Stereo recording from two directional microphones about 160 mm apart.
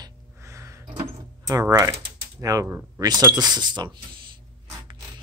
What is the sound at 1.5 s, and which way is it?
Speech, 20° right (ahead or behind).